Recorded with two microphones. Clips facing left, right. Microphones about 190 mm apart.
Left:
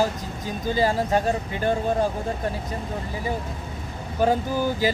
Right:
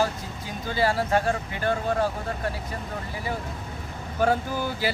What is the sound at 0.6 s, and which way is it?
Speech, 15° left (ahead or behind).